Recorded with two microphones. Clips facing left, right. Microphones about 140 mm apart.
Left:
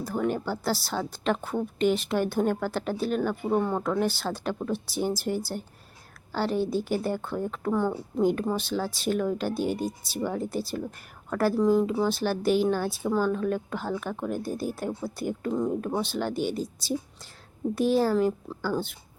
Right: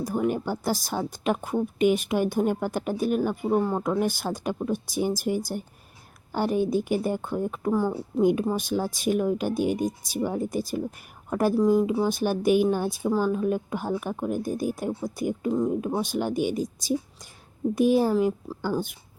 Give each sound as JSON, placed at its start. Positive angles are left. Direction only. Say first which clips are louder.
{"t": 0.0, "sound": "speech", "louder": "right 2 dB", "side_deg": -15}
{"t": 17.7, "sound": "speech", "louder": "right 2 dB", "side_deg": -15}